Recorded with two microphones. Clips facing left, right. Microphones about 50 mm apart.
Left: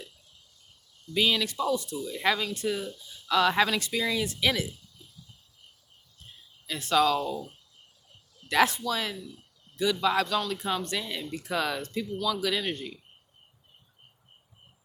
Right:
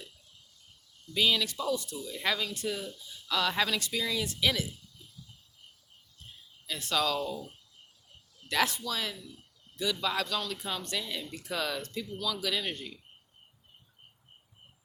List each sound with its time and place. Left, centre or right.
1.1 s speech: centre; by 4.7 s left
6.9 s speech: left
8.4 s speech: left